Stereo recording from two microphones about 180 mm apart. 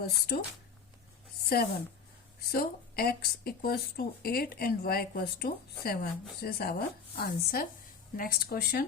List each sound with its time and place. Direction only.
0.0 s speech: 60° left (ahead or behind)
1.5 s speech: 55° left (ahead or behind)